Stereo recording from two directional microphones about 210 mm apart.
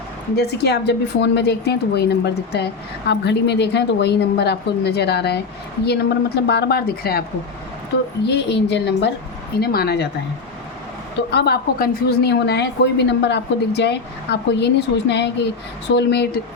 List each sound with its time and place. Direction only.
0.3 s a woman's voice: 50° left (ahead or behind)
11.3 s a woman's voice: 50° left (ahead or behind)